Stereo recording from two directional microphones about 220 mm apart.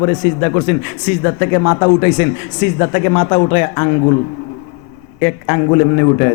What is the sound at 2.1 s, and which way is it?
A man's voice, 10° left (ahead or behind).